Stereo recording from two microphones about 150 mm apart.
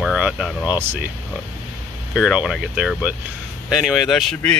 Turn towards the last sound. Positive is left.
turn(degrees=5)  # may be behind; listen again after turning